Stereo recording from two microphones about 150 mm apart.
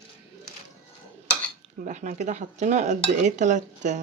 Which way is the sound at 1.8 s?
55° right (ahead or behind).